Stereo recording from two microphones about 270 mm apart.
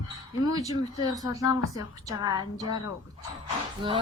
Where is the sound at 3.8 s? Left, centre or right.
Centre.